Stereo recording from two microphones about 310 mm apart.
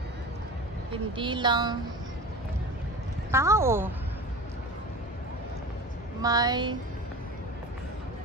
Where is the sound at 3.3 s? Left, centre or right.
Centre.